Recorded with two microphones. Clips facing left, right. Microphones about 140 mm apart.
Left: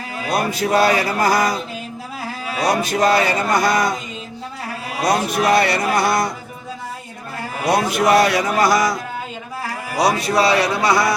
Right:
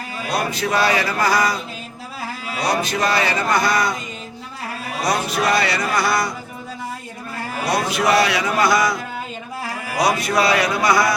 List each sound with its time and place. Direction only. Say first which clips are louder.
0.3 s speech: left 3 dB; 50° left (ahead or behind)
2.6 s speech: left 3 dB; 50° left (ahead or behind)
5.0 s speech: left 3 dB; 50° left (ahead or behind)
7.6 s speech: left 3 dB; 50° left (ahead or behind)
10.0 s a man's voice: left 2 dB; 35° left (ahead or behind)